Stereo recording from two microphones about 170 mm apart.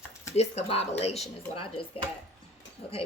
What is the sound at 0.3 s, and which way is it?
Speech, 40° left (ahead or behind).